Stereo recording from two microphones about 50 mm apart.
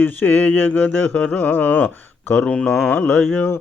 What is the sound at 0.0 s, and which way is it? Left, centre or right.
Mantra, left.